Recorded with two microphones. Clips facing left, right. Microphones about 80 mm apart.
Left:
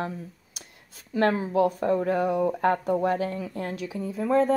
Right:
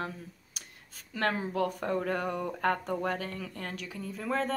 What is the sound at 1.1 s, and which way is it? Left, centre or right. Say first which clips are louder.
Speech: left 8 dB; left.